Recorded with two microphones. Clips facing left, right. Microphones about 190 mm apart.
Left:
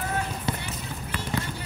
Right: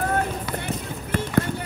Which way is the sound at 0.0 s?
55° right (ahead or behind).